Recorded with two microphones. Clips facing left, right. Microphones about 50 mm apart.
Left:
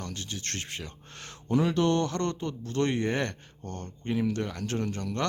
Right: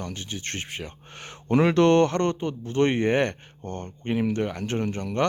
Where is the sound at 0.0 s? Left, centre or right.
Right.